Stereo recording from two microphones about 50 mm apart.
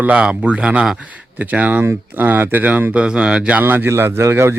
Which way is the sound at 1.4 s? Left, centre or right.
Right.